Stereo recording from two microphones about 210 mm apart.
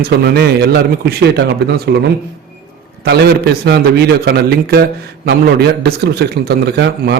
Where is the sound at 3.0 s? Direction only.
50° right (ahead or behind).